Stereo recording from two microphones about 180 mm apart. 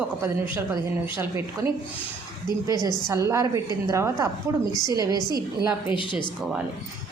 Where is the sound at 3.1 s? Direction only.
15° right (ahead or behind).